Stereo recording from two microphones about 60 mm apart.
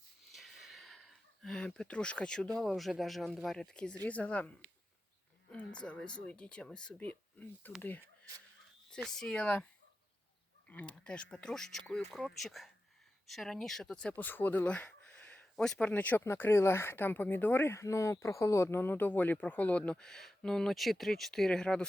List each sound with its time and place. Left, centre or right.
0.3 s a sound: centre
2.6 s speech: centre
4.0 s speech: left
9.0 s speech: centre
10.7 s speech: left
14.1 s speech: left
15.5 s speech: centre
15.8 s speech: left
16.2 s speech: left
17.7 s speech: left; by 21.8 s centre